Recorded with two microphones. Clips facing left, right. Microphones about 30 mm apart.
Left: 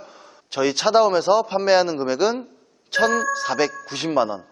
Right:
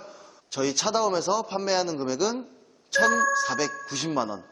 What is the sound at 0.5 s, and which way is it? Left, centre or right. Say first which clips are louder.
A man's voice: left 8 dB; left.